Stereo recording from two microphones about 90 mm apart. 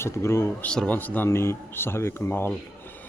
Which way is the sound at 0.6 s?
10° left (ahead or behind).